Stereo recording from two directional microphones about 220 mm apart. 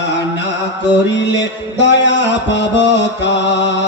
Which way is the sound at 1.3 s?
55° left (ahead or behind).